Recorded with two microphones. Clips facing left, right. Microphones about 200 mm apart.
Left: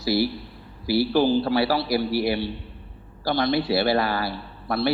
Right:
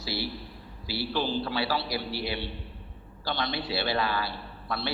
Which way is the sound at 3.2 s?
40° left (ahead or behind).